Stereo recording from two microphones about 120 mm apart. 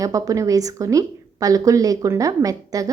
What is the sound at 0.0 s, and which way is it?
A woman's voice, 30° right (ahead or behind).